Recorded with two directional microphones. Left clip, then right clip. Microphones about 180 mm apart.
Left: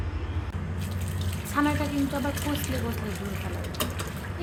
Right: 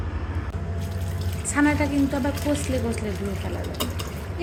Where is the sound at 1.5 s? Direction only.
Centre (ahead or behind).